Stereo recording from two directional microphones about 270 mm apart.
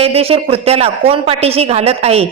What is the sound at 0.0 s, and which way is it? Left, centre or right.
Speech, right.